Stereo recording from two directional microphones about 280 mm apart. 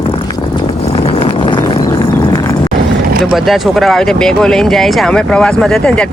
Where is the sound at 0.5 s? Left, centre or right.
Centre.